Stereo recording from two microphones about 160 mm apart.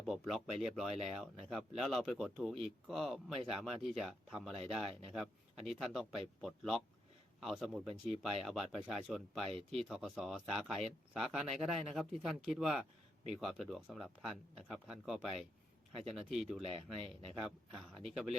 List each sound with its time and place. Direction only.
0.0 s a man's voice: centre (ahead or behind)
16.6 s speech: 35° right (ahead or behind)
17.9 s speech: centre (ahead or behind)